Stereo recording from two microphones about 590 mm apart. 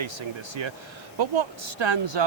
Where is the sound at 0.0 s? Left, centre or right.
Right.